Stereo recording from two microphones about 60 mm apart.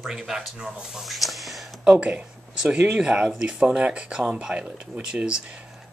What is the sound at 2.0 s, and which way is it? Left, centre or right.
Speech, centre.